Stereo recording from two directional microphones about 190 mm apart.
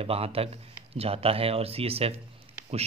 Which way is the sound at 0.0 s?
30° right (ahead or behind).